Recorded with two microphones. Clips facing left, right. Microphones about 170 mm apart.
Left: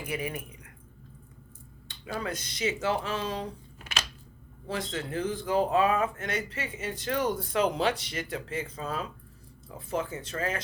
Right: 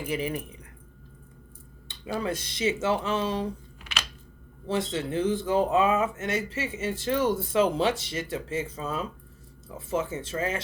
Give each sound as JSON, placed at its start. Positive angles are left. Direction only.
{"t": 0.0, "sound": "speech", "side_deg": -30}
{"t": 1.9, "sound": "speech", "side_deg": -25}
{"t": 4.7, "sound": "speech", "side_deg": -25}